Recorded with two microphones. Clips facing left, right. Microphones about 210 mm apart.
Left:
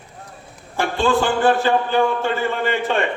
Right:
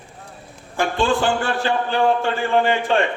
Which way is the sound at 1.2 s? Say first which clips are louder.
Left 4 dB; 55° left (ahead or behind).